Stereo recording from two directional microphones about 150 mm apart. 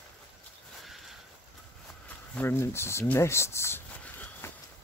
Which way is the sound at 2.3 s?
15° left (ahead or behind).